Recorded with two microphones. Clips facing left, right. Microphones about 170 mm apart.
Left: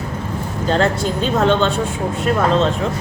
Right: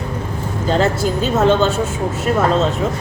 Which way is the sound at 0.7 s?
5° right (ahead or behind).